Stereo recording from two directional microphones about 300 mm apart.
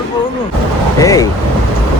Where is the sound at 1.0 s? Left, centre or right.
Centre.